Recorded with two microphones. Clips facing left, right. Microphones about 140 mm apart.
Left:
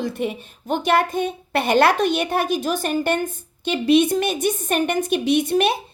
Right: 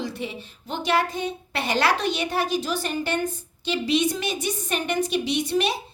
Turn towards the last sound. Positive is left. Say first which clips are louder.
# left 6 dB
turn(degrees=55)  # may be behind; listen again after turning